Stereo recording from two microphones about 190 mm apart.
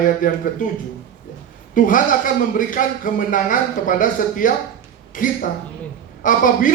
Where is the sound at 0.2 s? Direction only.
45° left (ahead or behind).